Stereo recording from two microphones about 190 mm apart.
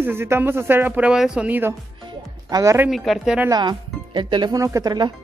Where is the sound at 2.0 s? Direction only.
20° right (ahead or behind).